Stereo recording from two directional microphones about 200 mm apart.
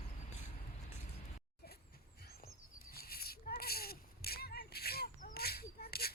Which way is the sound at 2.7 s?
50° left (ahead or behind).